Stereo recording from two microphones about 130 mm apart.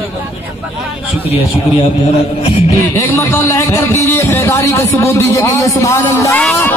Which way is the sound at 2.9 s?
20° left (ahead or behind).